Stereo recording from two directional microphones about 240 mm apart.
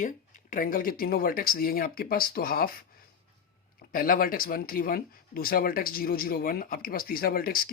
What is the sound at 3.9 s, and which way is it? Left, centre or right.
Speech, left.